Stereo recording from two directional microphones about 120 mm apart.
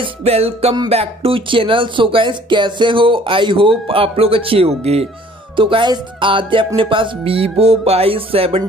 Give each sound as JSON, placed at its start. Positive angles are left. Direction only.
{"t": 0.0, "sound": "music", "side_deg": -55}
{"t": 0.8, "sound": "speech", "side_deg": -55}
{"t": 5.6, "sound": "speech", "side_deg": -45}